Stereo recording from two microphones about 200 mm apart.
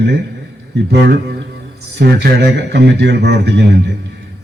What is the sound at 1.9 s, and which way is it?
Speech, 55° right (ahead or behind).